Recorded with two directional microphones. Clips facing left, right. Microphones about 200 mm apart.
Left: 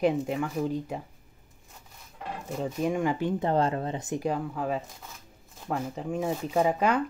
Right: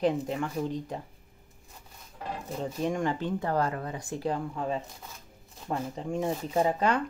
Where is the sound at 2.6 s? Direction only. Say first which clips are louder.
Left 2 dB; 5° left (ahead or behind).